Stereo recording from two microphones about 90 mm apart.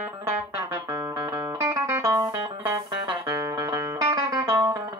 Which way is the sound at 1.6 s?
40° right (ahead or behind).